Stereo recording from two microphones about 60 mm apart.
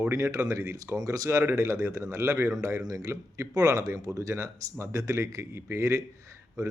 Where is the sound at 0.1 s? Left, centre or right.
Right.